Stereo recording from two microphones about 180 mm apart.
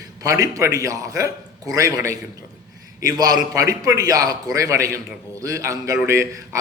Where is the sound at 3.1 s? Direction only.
20° right (ahead or behind).